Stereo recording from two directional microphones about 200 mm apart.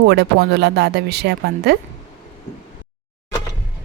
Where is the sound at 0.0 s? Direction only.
55° right (ahead or behind).